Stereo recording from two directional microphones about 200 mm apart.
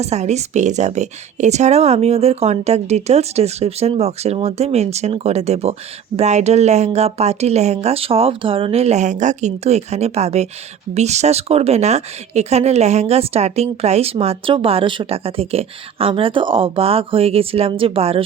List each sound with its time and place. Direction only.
0.0 s speech: 35° right (ahead or behind)